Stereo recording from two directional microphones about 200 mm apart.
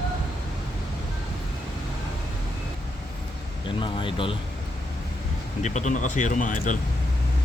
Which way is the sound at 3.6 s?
25° left (ahead or behind).